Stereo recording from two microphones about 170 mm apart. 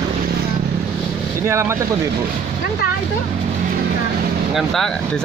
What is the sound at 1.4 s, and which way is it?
Speech, 15° right (ahead or behind).